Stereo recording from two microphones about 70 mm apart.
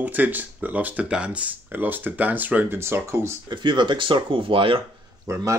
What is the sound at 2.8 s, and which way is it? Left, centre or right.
Speech, right.